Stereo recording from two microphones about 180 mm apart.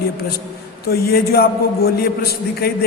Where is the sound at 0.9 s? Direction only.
60° left (ahead or behind).